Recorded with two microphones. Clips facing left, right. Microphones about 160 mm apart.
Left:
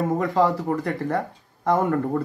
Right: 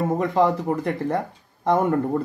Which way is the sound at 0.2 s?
20° right (ahead or behind).